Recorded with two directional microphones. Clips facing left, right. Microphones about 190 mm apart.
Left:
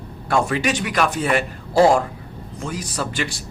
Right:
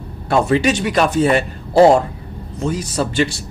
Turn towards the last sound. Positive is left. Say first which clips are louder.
# right 7 dB
turn(degrees=-25)  # may be behind; listen again after turning